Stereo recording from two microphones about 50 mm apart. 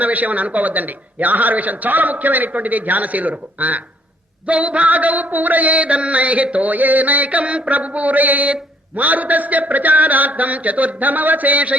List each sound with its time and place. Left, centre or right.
0.0 s mantra: right